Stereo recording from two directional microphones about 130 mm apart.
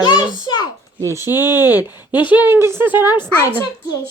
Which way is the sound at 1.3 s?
30° left (ahead or behind).